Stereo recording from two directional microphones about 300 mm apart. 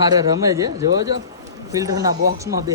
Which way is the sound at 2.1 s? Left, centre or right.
Right.